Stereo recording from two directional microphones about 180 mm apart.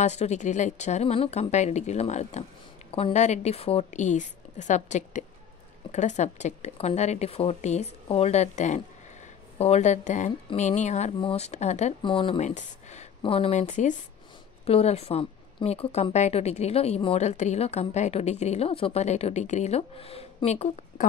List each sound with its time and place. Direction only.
0.0 s speech: 40° left (ahead or behind)
12.4 s speech: 40° left (ahead or behind)
13.2 s speech: 30° left (ahead or behind)